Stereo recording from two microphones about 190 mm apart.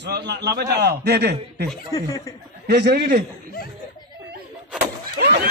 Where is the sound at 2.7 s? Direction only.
60° right (ahead or behind).